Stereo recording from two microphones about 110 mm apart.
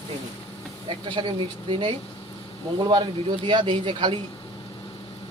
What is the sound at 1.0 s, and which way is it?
Speech, 45° right (ahead or behind).